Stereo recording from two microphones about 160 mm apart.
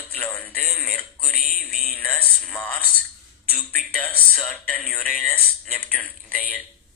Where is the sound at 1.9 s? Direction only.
10° left (ahead or behind).